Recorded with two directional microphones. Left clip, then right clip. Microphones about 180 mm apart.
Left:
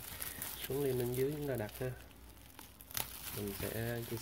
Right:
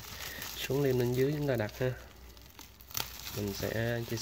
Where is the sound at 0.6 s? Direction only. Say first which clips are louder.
Right 6 dB; 25° right (ahead or behind).